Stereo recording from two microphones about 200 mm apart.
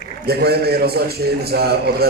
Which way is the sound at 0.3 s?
50° right (ahead or behind).